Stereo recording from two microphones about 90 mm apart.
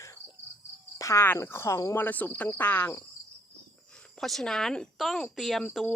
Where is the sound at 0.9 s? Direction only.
35° left (ahead or behind).